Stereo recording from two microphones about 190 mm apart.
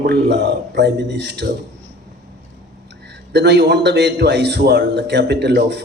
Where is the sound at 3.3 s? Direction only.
60° right (ahead or behind).